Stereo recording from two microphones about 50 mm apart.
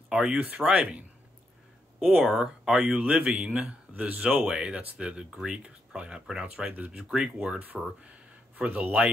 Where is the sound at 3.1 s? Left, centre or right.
Right.